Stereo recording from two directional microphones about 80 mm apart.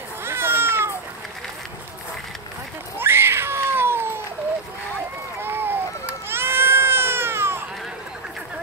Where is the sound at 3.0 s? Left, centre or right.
Right.